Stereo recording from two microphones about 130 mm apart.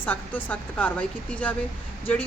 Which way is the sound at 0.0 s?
10° left (ahead or behind).